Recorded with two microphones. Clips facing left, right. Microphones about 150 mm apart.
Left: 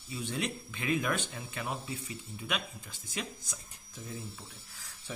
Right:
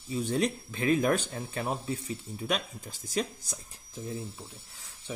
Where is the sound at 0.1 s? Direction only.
40° right (ahead or behind).